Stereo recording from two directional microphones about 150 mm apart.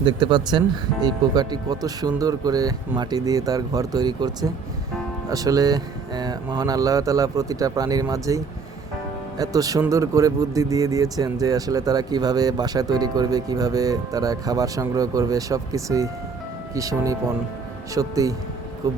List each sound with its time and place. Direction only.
0.0 s speech: 30° right (ahead or behind)
9.4 s speech: 25° right (ahead or behind)